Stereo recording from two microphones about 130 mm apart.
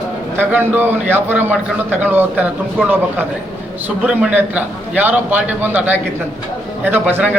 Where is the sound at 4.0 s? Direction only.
10° right (ahead or behind).